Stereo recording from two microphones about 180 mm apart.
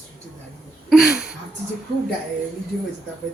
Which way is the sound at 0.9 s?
5° right (ahead or behind).